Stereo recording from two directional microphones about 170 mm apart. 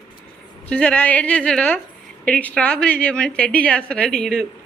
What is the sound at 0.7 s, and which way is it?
A woman's voice, 5° left (ahead or behind).